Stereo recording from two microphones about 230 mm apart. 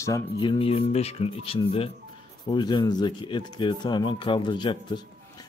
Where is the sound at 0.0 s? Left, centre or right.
Centre.